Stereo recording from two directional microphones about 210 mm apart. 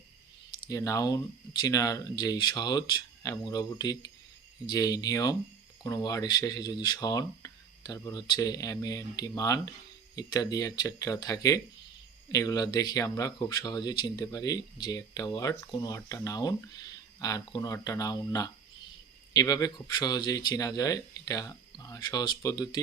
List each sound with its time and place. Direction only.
0.7 s speech: 15° left (ahead or behind)